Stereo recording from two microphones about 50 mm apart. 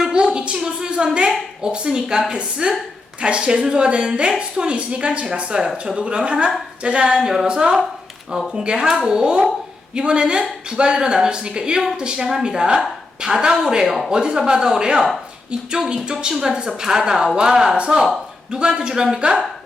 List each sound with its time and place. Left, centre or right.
0.0 s a woman's voice: centre